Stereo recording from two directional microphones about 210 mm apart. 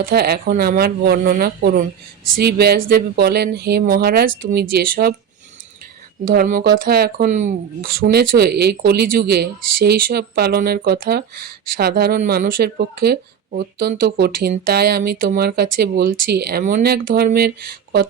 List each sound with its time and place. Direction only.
0.0 s speech: 50° right (ahead or behind)
6.2 s speech: 45° right (ahead or behind)